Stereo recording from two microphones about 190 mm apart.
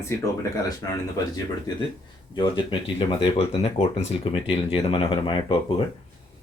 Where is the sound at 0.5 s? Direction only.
20° left (ahead or behind).